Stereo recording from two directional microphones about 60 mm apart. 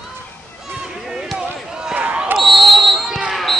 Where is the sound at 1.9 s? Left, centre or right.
Right.